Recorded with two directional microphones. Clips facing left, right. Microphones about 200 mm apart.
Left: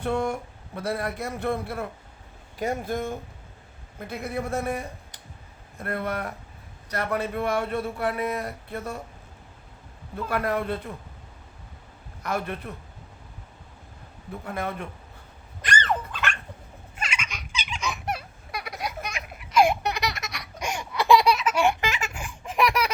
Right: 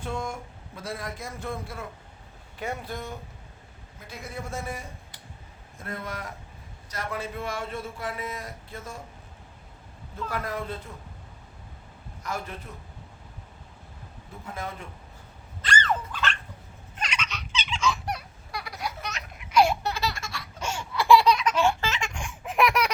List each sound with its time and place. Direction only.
0.0 s a man's voice: 65° left (ahead or behind)
2.6 s a man's voice: 45° left (ahead or behind); by 9.0 s 65° left (ahead or behind)
10.2 s a man's voice: 65° left (ahead or behind)
12.2 s a man's voice: 60° left (ahead or behind)
14.4 s a man's voice: 60° left (ahead or behind)
15.6 s fowl: 20° left (ahead or behind)
16.9 s a sound: 10° left (ahead or behind)
19.6 s laughter: 20° left (ahead or behind)
21.3 s baby laughter: 10° left (ahead or behind)